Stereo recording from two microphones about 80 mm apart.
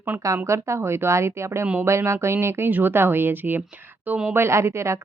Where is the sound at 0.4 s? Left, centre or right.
Right.